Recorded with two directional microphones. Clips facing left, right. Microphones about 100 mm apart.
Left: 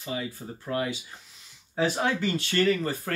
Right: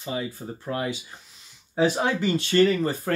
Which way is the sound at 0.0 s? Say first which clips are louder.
Right 3 dB; 25° right (ahead or behind).